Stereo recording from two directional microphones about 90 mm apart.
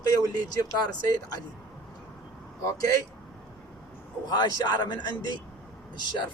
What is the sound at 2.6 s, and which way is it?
Speech, 40° left (ahead or behind).